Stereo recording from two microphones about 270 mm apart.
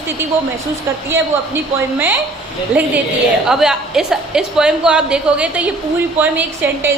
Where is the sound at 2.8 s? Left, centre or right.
Centre.